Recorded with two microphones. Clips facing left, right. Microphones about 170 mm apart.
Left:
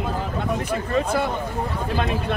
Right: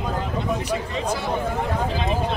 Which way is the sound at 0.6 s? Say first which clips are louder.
Left 3 dB; 50° left (ahead or behind).